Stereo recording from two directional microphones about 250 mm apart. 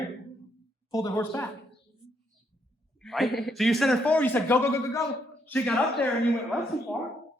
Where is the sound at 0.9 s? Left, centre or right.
Centre.